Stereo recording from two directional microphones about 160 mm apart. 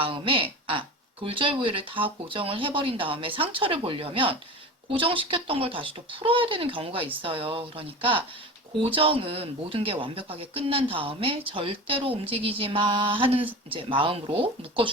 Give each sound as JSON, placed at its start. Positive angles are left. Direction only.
{"t": 0.0, "sound": "speech", "side_deg": -35}